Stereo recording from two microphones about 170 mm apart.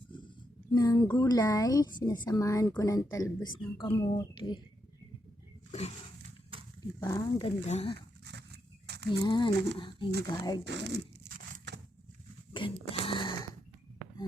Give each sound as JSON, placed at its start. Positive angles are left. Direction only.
{"t": 0.7, "sound": "speech", "side_deg": 25}
{"t": 6.5, "sound": "dog", "side_deg": -35}
{"t": 7.0, "sound": "speech", "side_deg": 20}
{"t": 7.4, "sound": "speech", "side_deg": 40}
{"t": 7.9, "sound": "a sound", "side_deg": -85}
{"t": 9.0, "sound": "speech", "side_deg": 25}
{"t": 10.7, "sound": "speech", "side_deg": -90}
{"t": 12.5, "sound": "a sound", "side_deg": 30}